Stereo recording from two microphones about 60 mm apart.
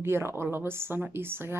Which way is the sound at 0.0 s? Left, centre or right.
Right.